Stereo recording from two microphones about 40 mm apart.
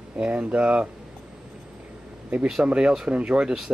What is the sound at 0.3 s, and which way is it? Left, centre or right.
Speech, right.